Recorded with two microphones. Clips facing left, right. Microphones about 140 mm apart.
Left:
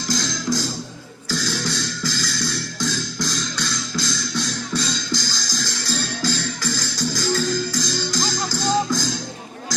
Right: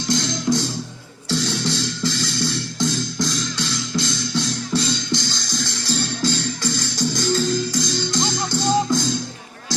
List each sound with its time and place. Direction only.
0.1 s music: 25° right (ahead or behind)